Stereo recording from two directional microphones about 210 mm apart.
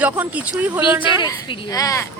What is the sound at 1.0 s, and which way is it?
A woman's voice, 20° left (ahead or behind).